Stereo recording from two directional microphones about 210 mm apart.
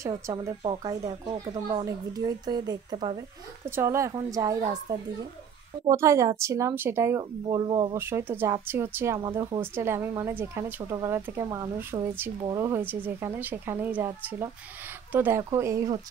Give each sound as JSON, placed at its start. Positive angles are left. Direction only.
{"t": 0.4, "sound": "a woman's voice", "side_deg": -20}
{"t": 5.9, "sound": "a woman's voice", "side_deg": -15}